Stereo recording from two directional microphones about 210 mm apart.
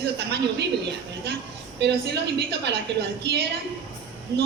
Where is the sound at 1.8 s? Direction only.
55° right (ahead or behind).